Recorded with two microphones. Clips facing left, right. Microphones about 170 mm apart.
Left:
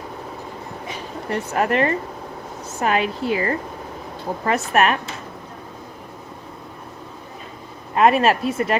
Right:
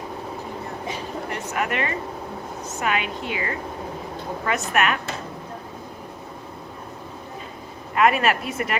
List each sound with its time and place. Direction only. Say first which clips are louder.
1.5 s speech: left 7 dB; 35° left (ahead or behind)
7.9 s speech: left 4 dB; 30° left (ahead or behind)